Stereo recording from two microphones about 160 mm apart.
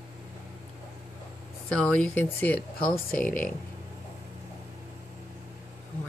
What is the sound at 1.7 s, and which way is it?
Speech, 5° left (ahead or behind).